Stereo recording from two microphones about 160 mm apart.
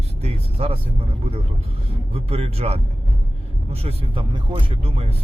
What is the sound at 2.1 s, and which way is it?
Speech, 40° right (ahead or behind).